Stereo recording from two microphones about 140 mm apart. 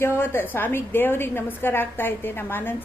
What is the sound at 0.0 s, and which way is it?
A woman's voice, 15° left (ahead or behind).